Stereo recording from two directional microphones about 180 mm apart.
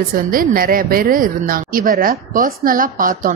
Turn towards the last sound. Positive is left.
turn(degrees=-50)  # may be behind; listen again after turning